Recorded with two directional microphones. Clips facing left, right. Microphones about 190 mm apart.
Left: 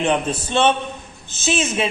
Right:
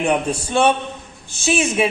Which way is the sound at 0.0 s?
10° right (ahead or behind).